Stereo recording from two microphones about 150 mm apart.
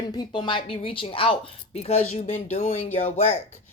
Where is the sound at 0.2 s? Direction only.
30° left (ahead or behind).